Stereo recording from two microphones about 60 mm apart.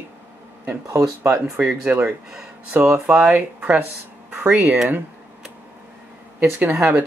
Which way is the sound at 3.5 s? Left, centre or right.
Centre.